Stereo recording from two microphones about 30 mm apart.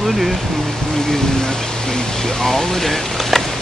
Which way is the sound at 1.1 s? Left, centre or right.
Centre.